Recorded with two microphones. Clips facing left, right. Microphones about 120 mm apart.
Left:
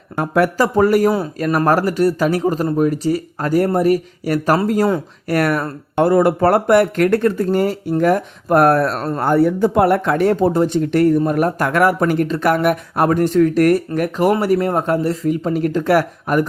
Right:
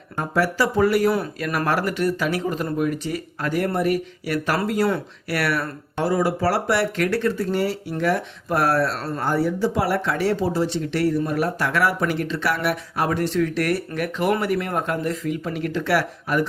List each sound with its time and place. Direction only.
0.2 s speech: 55° left (ahead or behind)